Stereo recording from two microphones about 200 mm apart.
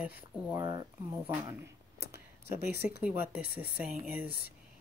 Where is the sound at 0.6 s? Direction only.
20° right (ahead or behind).